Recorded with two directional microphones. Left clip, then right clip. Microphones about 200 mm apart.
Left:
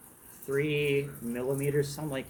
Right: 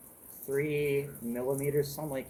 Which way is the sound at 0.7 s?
5° left (ahead or behind).